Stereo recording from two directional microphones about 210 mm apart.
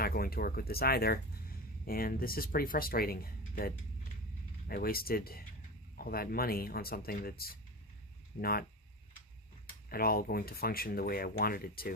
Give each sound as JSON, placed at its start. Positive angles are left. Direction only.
{"t": 0.0, "sound": "speech", "side_deg": 45}
{"t": 4.7, "sound": "speech", "side_deg": 45}
{"t": 9.9, "sound": "speech", "side_deg": 45}